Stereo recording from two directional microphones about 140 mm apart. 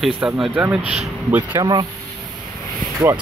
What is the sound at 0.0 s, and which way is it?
Speech, 5° right (ahead or behind).